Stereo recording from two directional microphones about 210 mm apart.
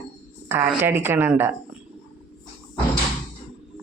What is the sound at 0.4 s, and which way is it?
A man's voice, 10° right (ahead or behind).